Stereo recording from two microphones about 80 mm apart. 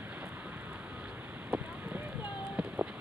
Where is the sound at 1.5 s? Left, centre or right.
Centre.